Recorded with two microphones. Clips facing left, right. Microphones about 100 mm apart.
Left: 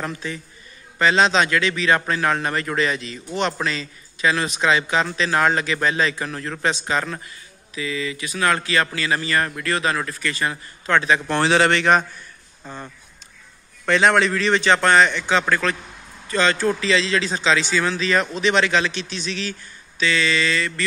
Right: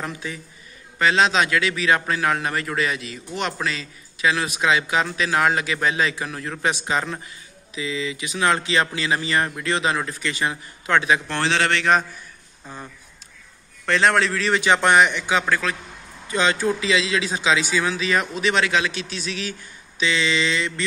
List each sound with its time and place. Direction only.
0.0 s a man's voice: 10° right (ahead or behind)
11.2 s a man's voice: 10° left (ahead or behind)
13.8 s a man's voice: centre (ahead or behind); by 20.8 s 20° right (ahead or behind)